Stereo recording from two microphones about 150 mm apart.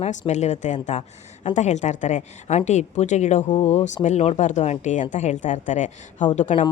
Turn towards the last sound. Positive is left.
turn(degrees=55)  # may be behind; listen again after turning